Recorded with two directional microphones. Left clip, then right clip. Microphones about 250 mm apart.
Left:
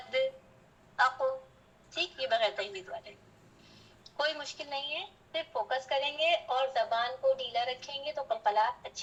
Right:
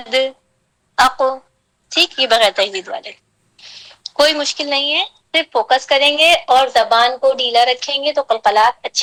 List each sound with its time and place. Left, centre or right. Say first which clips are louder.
0.9 s a woman's voice: right 15 dB; right
4.2 s a woman's voice: right 19 dB; right